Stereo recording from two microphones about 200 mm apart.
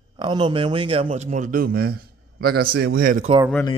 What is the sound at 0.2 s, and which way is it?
A man's voice, 25° right (ahead or behind).